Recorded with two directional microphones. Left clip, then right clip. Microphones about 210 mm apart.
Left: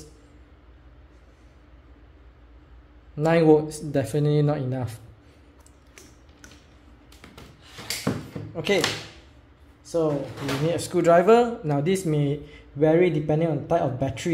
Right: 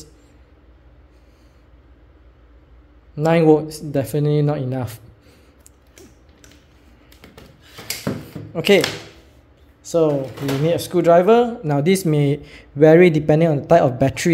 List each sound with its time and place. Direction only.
3.2 s a man's voice: 15° right (ahead or behind)
8.5 s a man's voice: 40° right (ahead or behind)
9.8 s speech: 45° right (ahead or behind)
10.7 s a man's voice: 20° right (ahead or behind)
11.7 s a man's voice: 25° right (ahead or behind)